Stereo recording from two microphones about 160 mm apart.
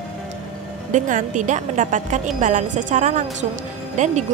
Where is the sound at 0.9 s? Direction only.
55° right (ahead or behind).